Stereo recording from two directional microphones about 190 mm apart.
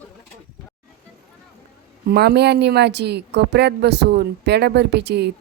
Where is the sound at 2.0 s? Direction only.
60° right (ahead or behind).